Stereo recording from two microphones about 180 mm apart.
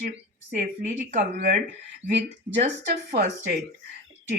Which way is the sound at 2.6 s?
40° right (ahead or behind).